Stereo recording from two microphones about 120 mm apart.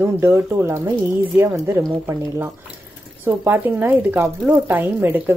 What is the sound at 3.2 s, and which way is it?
Speech, 15° right (ahead or behind).